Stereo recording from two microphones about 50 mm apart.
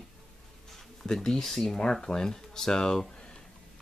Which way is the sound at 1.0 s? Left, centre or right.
Centre.